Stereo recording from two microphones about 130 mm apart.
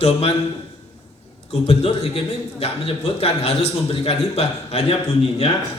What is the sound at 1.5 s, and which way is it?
A man's voice, 50° left (ahead or behind).